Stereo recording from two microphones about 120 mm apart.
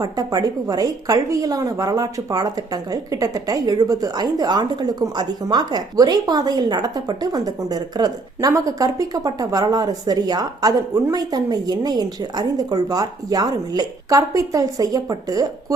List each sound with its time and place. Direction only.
0.0 s a woman's voice: 30° right (ahead or behind)